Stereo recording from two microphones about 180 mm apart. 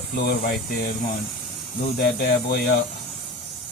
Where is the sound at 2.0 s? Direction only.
55° left (ahead or behind).